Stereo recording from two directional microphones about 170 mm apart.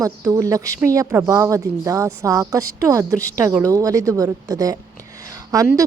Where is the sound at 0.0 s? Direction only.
20° right (ahead or behind).